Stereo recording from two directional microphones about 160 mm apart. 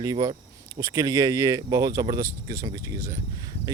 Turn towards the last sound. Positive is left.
turn(degrees=-20)  # may be behind; listen again after turning